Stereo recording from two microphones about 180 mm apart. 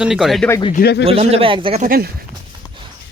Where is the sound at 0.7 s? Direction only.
60° left (ahead or behind).